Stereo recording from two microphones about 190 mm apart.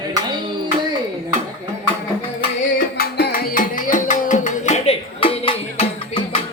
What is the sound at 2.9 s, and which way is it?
Music, 50° left (ahead or behind).